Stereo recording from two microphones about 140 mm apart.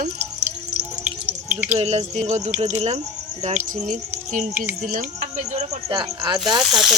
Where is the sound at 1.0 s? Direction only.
10° right (ahead or behind).